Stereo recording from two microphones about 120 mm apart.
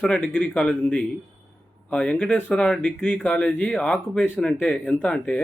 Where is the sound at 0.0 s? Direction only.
5° left (ahead or behind).